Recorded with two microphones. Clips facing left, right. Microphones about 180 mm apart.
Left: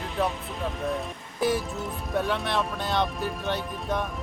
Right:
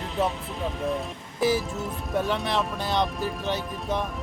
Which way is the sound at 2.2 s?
Centre (ahead or behind).